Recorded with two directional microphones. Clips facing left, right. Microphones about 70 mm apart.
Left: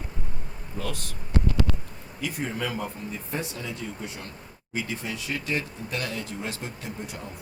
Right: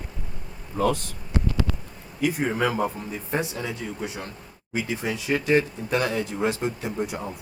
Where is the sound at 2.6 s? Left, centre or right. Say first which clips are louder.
Right 9 dB; centre.